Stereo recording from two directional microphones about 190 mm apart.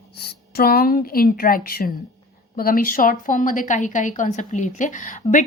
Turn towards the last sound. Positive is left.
turn(degrees=40)  # may be behind; listen again after turning